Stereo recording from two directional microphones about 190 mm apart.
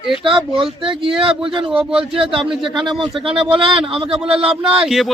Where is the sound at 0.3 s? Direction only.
25° right (ahead or behind).